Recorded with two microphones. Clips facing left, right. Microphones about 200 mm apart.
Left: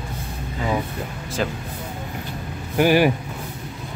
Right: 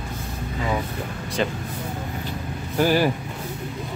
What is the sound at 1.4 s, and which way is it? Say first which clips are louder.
Speech: even; 5° left (ahead or behind).